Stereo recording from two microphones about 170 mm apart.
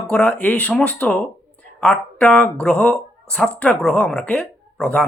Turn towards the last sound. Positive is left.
turn(degrees=5)  # may be behind; listen again after turning